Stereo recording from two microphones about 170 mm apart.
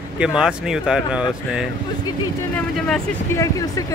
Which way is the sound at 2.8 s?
5° left (ahead or behind).